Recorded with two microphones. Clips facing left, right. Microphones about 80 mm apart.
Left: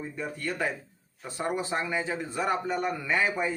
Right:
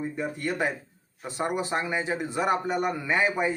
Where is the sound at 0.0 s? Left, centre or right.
Centre.